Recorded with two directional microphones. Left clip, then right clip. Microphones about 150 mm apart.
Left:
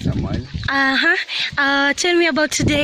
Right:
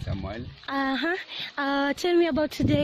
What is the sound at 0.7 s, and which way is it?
Speech, 10° right (ahead or behind).